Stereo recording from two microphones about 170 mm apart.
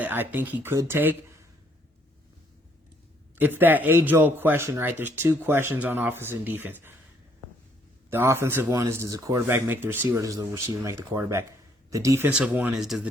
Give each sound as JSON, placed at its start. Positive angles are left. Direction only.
{"t": 0.0, "sound": "a man's voice", "side_deg": -10}
{"t": 3.3, "sound": "a man's voice", "side_deg": -10}
{"t": 8.1, "sound": "a man's voice", "side_deg": -15}